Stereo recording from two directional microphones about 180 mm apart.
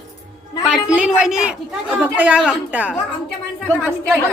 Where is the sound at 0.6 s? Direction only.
5° right (ahead or behind).